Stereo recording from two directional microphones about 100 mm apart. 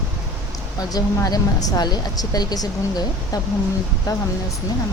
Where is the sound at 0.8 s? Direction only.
40° left (ahead or behind).